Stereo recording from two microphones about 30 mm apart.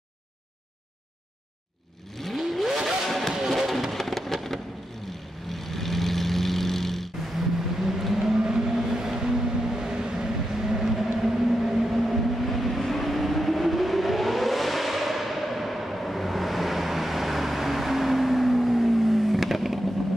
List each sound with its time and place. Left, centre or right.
2.1 s vehicle: centre
3.1 s music: centre
3.3 s music: centre
3.9 s rain: centre
5.5 s vehicle: centre
7.3 s vehicle: centre